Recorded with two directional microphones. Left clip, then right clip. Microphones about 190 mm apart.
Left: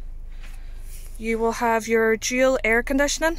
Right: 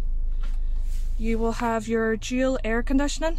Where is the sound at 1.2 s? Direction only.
15° left (ahead or behind).